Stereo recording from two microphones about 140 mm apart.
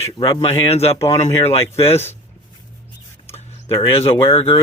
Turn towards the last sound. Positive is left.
turn(degrees=45)  # may be behind; listen again after turning